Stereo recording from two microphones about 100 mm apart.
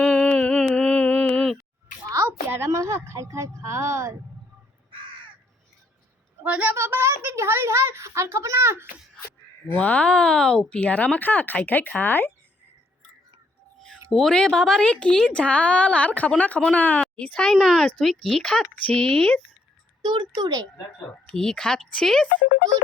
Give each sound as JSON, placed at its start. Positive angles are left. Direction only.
{"t": 0.0, "sound": "a sound", "side_deg": 10}
{"t": 2.5, "sound": "speech", "side_deg": -30}
{"t": 6.4, "sound": "a woman's voice", "side_deg": -15}
{"t": 6.7, "sound": "speech", "side_deg": -25}
{"t": 9.7, "sound": "speech", "side_deg": 15}
{"t": 14.1, "sound": "speech", "side_deg": 5}
{"t": 20.0, "sound": "speech", "side_deg": -50}
{"t": 21.2, "sound": "speech", "side_deg": 10}